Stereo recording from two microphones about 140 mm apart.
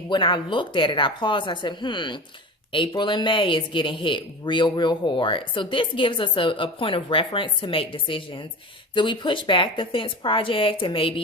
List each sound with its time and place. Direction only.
0.1 s speech: 35° left (ahead or behind)